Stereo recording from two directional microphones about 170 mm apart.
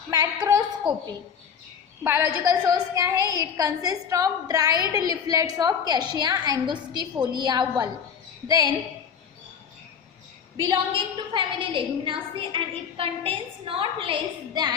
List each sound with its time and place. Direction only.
0.1 s a woman's voice: 15° right (ahead or behind)
10.6 s a woman's voice: 25° right (ahead or behind)